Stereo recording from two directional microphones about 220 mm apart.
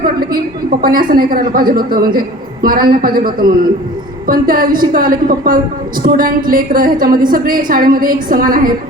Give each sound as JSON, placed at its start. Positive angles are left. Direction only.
{"t": 0.0, "sound": "a woman's voice", "side_deg": -40}